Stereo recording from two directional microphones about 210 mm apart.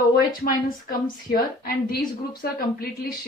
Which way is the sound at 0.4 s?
45° left (ahead or behind).